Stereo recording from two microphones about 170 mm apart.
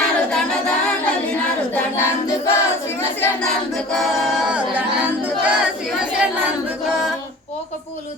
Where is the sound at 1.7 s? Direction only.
15° left (ahead or behind).